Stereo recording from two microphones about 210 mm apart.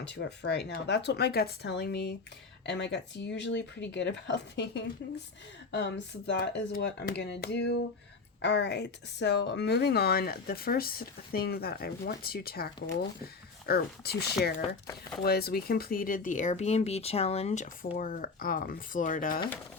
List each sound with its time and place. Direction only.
0.2 s speech: 55° left (ahead or behind)